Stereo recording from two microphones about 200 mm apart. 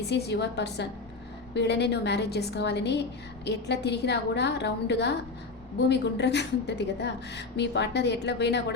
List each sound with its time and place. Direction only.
0.1 s a woman's voice: 55° left (ahead or behind)